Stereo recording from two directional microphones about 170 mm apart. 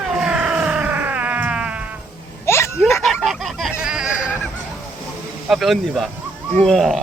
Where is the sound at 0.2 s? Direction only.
5° right (ahead or behind).